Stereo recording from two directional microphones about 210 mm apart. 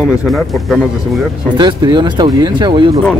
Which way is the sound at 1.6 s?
20° right (ahead or behind).